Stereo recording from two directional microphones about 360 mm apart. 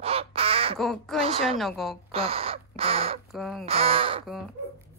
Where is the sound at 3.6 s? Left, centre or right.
Centre.